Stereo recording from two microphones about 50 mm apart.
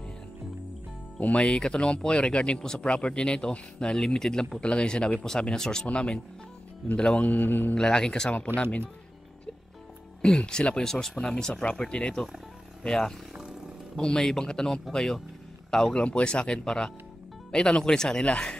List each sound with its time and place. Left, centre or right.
1.2 s speech: left
7.2 s a man's voice: left
7.7 s speech: centre
10.2 s speech: centre
13.4 s roaring cats: centre
14.0 s speech: centre
16.0 s speech: left